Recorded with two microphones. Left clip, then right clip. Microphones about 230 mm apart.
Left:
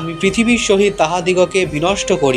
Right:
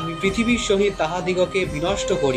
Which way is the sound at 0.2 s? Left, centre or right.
Left.